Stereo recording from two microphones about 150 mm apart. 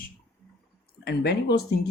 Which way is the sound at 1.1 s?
90° left.